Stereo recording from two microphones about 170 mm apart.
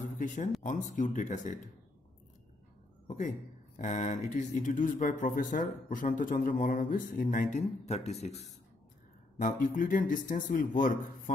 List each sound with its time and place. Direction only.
0.7 s speech: 45° left (ahead or behind)
3.1 s speech: 50° left (ahead or behind)
9.4 s speech: 55° left (ahead or behind)